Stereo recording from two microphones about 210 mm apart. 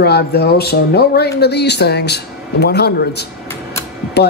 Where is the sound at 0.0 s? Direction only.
50° left (ahead or behind).